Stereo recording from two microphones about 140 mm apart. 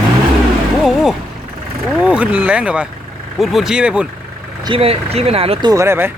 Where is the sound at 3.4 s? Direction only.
Centre (ahead or behind).